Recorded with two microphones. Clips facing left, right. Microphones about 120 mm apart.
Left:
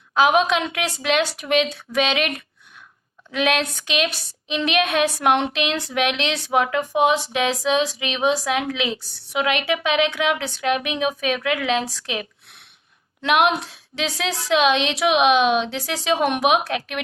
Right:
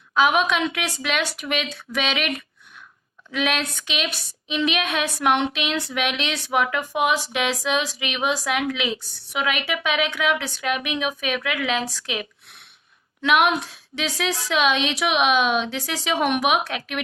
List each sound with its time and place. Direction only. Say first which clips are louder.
0.1 s a woman's voice: left 2 dB; 40° left (ahead or behind)
3.3 s a woman's voice: left 3 dB; 35° left (ahead or behind)